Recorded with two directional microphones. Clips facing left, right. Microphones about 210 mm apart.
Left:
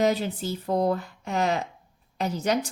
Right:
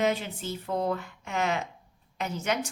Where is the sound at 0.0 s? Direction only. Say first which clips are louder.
Left 4 dB; 35° left (ahead or behind).